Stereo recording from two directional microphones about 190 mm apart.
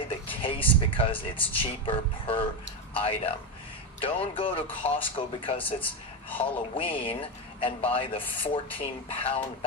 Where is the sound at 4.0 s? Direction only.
30° left (ahead or behind).